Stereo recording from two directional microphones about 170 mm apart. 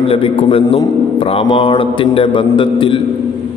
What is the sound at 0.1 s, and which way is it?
Mantra, 35° left (ahead or behind).